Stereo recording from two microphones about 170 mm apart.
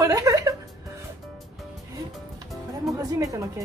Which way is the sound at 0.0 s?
20° right (ahead or behind).